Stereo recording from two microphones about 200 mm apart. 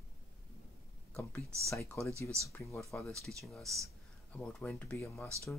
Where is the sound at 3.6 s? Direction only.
15° right (ahead or behind).